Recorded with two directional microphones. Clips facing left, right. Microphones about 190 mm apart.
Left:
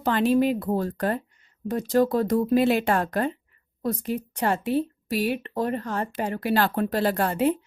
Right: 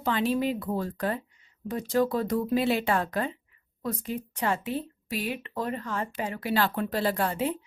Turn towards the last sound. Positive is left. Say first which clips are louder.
# left 5 dB
turn(degrees=45)  # may be behind; listen again after turning